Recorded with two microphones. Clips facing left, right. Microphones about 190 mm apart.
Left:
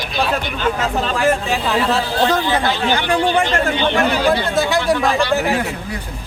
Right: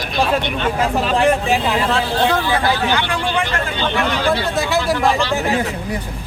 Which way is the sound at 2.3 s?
15° left (ahead or behind).